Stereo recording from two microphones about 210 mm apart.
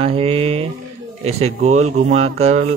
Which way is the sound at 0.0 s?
25° right (ahead or behind).